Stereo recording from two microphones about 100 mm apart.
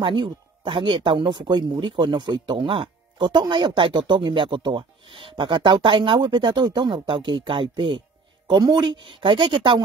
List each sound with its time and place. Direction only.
0.0 s speech: 55° right (ahead or behind)